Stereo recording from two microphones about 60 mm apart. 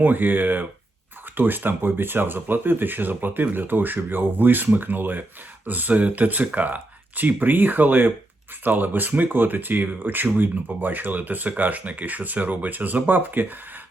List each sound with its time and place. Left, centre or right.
0.0 s speech: right